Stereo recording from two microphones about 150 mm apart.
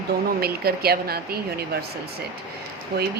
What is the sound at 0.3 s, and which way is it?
Speech, 90° right.